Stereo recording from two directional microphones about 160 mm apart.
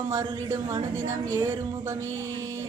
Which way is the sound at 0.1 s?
25° right (ahead or behind).